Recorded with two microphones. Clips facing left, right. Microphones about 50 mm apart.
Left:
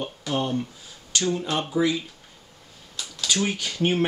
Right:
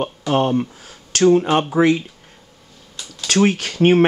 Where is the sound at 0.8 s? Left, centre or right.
Right.